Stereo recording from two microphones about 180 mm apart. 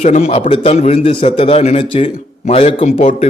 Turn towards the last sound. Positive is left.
turn(degrees=40)  # may be behind; listen again after turning